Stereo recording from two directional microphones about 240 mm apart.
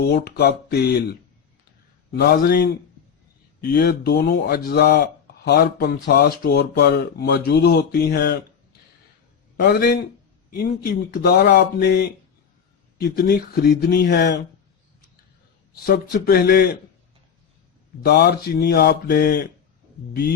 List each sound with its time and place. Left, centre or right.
0.0 s speech: left
2.1 s speech: left
9.6 s speech: left
15.9 s speech: left
18.0 s speech: left